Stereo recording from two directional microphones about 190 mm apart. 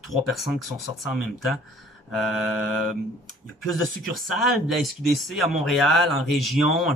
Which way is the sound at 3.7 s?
Centre (ahead or behind).